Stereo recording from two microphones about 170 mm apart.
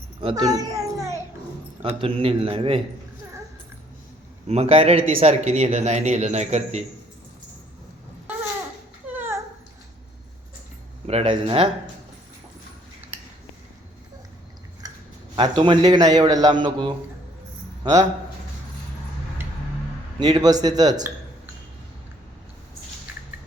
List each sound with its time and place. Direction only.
0.2 s speech: 30° right (ahead or behind)
0.5 s children playing: 20° right (ahead or behind)
1.8 s speech: 35° right (ahead or behind)
4.4 s speech: 35° right (ahead or behind)
9.1 s a sound: 15° right (ahead or behind)
11.0 s speech: 40° right (ahead or behind)
14.8 s chewing: 20° right (ahead or behind)
15.4 s a man's voice: 30° right (ahead or behind)
20.1 s a man's voice: 25° right (ahead or behind)